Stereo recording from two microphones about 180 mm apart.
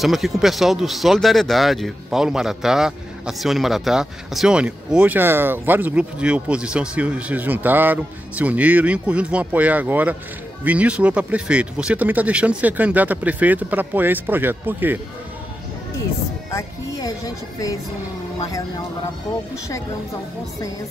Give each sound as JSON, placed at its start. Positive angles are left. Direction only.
{"t": 0.0, "sound": "speech", "side_deg": 0}
{"t": 16.4, "sound": "music", "side_deg": 15}